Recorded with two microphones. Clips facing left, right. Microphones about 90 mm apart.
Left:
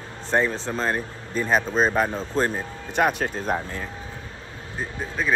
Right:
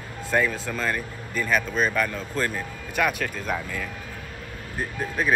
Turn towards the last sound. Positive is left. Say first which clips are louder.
# right 1 dB
turn(degrees=-10)  # may be behind; listen again after turning